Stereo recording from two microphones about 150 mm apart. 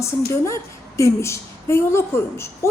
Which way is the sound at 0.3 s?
20° left (ahead or behind).